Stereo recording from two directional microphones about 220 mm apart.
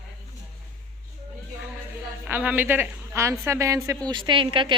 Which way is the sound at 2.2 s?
10° right (ahead or behind).